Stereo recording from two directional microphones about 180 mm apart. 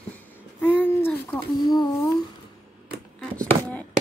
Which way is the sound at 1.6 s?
20° left (ahead or behind).